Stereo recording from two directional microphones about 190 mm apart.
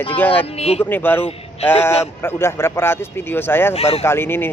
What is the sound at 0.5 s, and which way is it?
Speech, 35° left (ahead or behind).